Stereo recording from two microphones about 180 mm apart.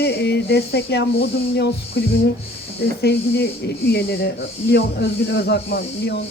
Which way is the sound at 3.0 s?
65° left (ahead or behind).